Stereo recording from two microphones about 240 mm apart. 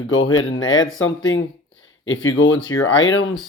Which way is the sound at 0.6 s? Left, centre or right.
Left.